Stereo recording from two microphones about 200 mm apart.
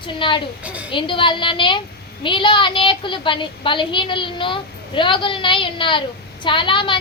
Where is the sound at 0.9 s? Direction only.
25° left (ahead or behind).